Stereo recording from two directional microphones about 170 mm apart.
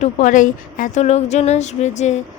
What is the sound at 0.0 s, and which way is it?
Speech, 45° left (ahead or behind).